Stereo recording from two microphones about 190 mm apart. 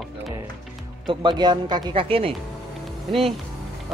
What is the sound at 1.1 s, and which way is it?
Speech, 20° right (ahead or behind).